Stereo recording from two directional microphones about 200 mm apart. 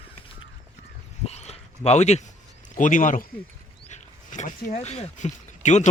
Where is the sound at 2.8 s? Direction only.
40° left (ahead or behind).